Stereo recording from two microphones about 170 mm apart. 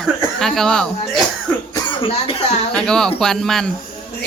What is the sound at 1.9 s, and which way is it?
Speech, 30° left (ahead or behind).